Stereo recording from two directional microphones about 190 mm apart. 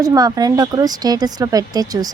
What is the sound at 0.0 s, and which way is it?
Speech, 20° right (ahead or behind).